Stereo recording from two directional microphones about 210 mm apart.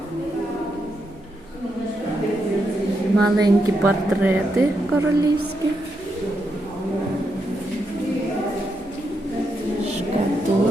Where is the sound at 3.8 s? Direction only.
5° right (ahead or behind).